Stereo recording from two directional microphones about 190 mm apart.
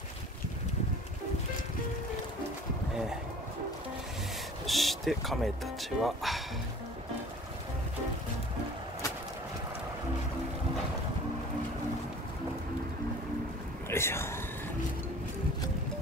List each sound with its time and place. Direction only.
4.6 s speech: centre (ahead or behind)
13.8 s speech: 15° left (ahead or behind)